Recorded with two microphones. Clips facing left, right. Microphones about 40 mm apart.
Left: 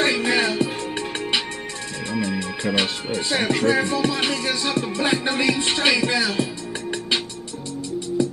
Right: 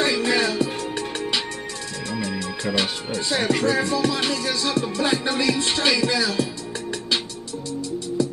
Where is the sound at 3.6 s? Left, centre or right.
Left.